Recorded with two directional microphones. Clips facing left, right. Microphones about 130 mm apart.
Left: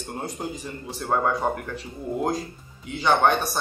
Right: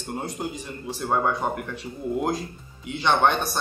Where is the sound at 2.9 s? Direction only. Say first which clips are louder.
Left 1 dB; centre (ahead or behind).